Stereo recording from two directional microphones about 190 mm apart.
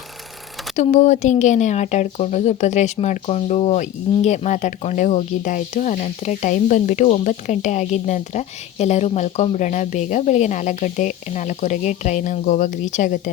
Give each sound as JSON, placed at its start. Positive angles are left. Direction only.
{"t": 0.8, "sound": "speech", "side_deg": 40}